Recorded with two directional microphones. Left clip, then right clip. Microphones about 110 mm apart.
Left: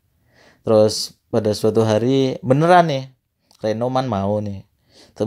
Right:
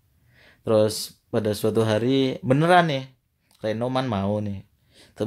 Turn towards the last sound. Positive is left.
turn(degrees=40)  # may be behind; listen again after turning